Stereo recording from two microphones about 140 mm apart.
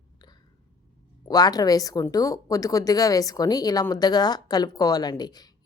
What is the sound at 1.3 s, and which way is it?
Speech, 25° left (ahead or behind).